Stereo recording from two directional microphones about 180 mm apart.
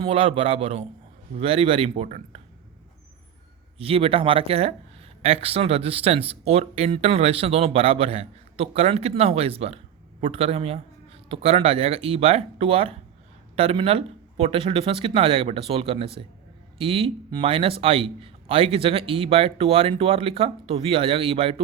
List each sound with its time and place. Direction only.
0.0 s speech: 30° right (ahead or behind)
3.8 s speech: 30° right (ahead or behind)